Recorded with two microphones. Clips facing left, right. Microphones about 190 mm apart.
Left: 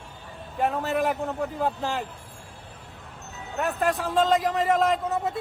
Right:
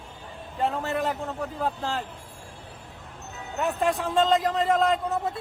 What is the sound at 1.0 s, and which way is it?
Speech, 20° left (ahead or behind).